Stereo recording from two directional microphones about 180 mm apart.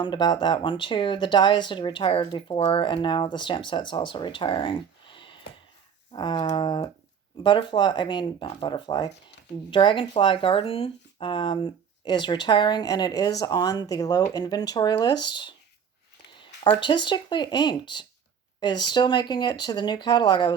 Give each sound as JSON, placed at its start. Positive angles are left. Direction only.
{"t": 0.0, "sound": "speech", "side_deg": 25}
{"t": 5.1, "sound": "a sound", "side_deg": 30}
{"t": 6.1, "sound": "speech", "side_deg": 25}